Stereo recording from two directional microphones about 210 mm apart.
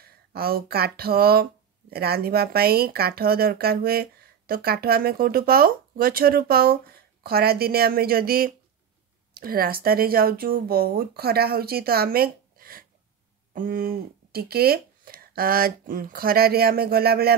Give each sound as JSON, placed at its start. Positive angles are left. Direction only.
{"t": 0.0, "sound": "speech", "side_deg": -45}